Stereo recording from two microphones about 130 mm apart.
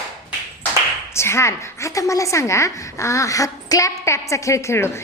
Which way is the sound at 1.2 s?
20° left (ahead or behind).